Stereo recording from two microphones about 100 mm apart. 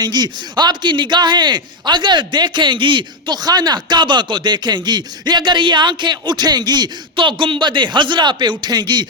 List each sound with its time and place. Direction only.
0.0 s a man's voice: 45° right (ahead or behind)